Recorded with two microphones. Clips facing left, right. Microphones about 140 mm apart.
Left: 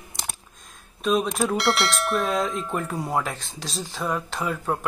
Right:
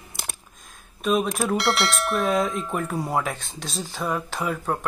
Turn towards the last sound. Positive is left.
turn(degrees=0)  # may be behind; listen again after turning